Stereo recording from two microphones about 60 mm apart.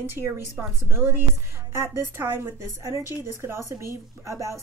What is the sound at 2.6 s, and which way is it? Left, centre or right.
Speech, right.